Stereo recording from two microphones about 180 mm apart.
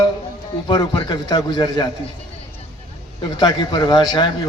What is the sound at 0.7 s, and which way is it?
A man's voice, 25° left (ahead or behind).